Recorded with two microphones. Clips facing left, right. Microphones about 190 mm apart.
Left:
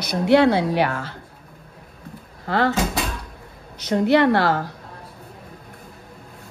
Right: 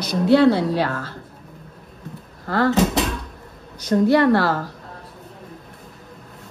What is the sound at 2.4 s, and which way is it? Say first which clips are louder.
Speech: right 1 dB; 65° left (ahead or behind).